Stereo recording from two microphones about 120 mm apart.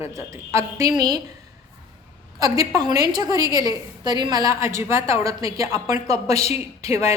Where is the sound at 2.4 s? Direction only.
30° right (ahead or behind).